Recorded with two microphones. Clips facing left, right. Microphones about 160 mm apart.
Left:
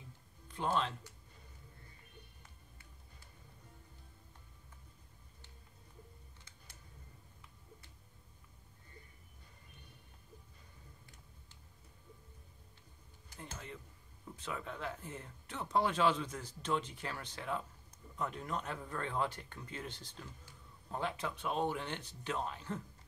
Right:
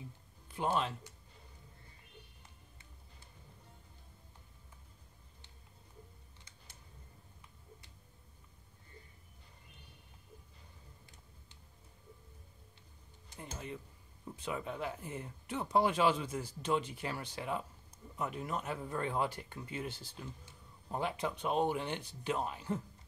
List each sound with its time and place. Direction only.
0.5 s speech: 10° right (ahead or behind)
13.3 s a sound: 15° right (ahead or behind)
14.3 s speech: 15° right (ahead or behind)